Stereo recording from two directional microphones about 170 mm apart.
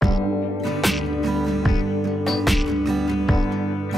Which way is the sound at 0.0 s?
Centre (ahead or behind).